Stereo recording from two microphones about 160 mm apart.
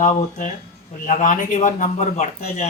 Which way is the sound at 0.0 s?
50° left (ahead or behind).